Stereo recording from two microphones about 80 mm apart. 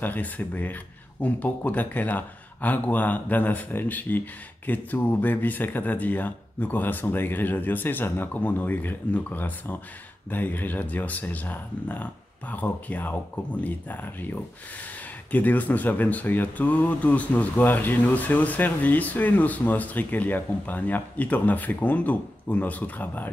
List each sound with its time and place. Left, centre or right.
0.0 s speech: left
15.3 s speech: left